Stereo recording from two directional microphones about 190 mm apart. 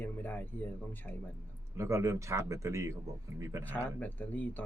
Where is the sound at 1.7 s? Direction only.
15° right (ahead or behind).